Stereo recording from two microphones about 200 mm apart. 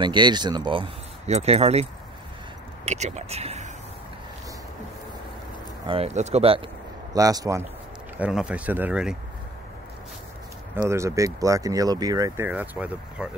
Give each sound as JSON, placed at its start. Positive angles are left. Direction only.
{"t": 0.0, "sound": "speech", "side_deg": -20}
{"t": 5.9, "sound": "speech", "side_deg": -30}
{"t": 7.2, "sound": "speech", "side_deg": -15}
{"t": 8.2, "sound": "speech", "side_deg": -5}
{"t": 10.8, "sound": "speech", "side_deg": -15}